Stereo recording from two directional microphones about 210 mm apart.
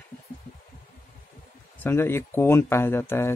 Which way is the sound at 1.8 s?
10° left (ahead or behind).